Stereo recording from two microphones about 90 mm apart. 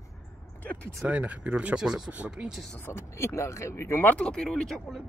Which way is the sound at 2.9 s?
30° left (ahead or behind).